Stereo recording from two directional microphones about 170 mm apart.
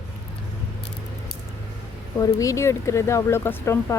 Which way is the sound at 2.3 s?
20° left (ahead or behind).